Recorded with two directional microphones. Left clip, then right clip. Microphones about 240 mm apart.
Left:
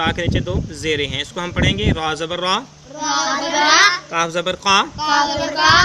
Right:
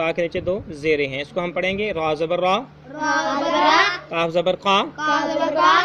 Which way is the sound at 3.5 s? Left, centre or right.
Left.